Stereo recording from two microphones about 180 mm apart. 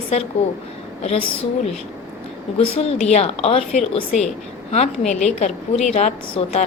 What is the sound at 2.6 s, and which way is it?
A woman's voice, 35° left (ahead or behind).